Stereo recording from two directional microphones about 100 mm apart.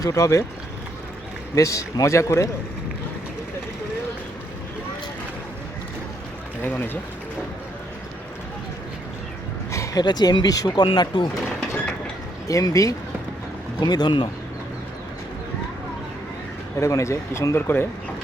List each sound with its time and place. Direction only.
0.0 s a man's voice: 35° left (ahead or behind)
1.5 s a man's voice: 35° left (ahead or behind)
6.6 s speech: 20° left (ahead or behind)
9.7 s a sound: 30° left (ahead or behind)
10.0 s speech: 45° left (ahead or behind)
12.5 s a man's voice: 35° left (ahead or behind); by 14.3 s 50° left (ahead or behind)
16.7 s speech: 30° left (ahead or behind)